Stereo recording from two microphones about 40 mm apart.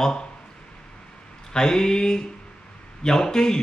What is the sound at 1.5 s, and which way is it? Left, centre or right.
Speech, centre.